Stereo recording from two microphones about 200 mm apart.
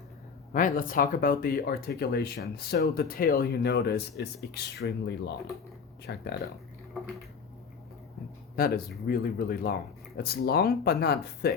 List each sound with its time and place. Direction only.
0.5 s speech: 45° left (ahead or behind)
8.5 s speech: 50° left (ahead or behind)